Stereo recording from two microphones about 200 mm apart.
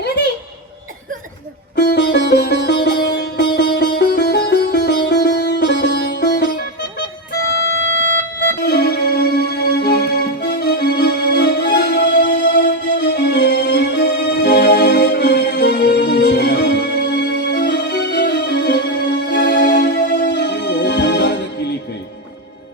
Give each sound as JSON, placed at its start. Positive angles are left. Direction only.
{"t": 1.7, "sound": "music", "side_deg": 55}
{"t": 2.8, "sound": "sitar", "side_deg": 55}
{"t": 7.6, "sound": "music", "side_deg": 65}
{"t": 8.6, "sound": "music", "side_deg": 55}